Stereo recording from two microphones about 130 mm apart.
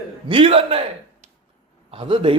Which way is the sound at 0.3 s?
45° right (ahead or behind).